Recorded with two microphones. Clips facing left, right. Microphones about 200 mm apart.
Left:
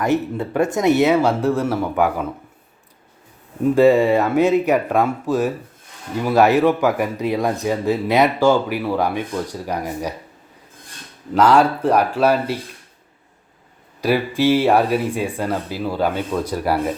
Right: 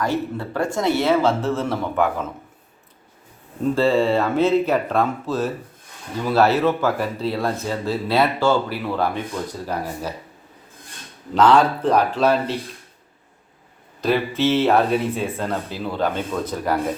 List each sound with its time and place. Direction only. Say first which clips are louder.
0.0 s speech: left 4 dB; 20° left (ahead or behind)
3.6 s speech: left 5 dB; 15° left (ahead or behind)
11.3 s speech: left 1 dB; 10° left (ahead or behind)
14.0 s speech: left 2 dB; 10° left (ahead or behind)